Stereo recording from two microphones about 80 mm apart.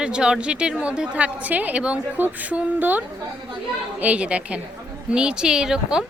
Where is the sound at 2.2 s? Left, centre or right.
Centre.